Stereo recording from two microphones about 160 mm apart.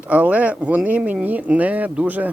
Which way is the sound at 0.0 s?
10° right (ahead or behind).